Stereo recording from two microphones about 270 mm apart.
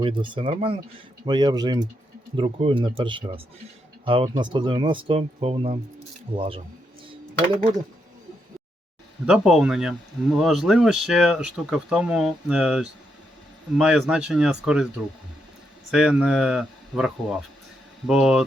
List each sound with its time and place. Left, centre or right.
0.0 s speech: centre
7.1 s a sound: centre
9.2 s speech: centre
15.9 s speech: centre